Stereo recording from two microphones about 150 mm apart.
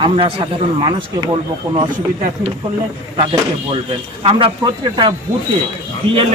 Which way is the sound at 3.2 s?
35° right (ahead or behind).